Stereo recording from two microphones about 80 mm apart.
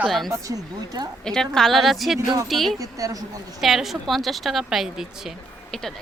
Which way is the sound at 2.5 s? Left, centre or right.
Centre.